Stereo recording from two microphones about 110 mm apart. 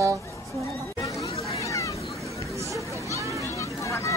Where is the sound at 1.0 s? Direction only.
30° left (ahead or behind).